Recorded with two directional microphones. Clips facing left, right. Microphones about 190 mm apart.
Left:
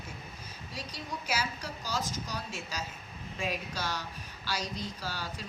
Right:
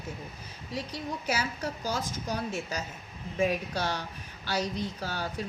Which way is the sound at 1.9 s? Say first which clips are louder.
Right 1 dB; 55° right (ahead or behind).